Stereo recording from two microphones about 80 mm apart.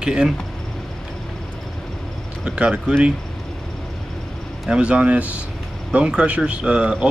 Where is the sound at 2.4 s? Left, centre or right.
Centre.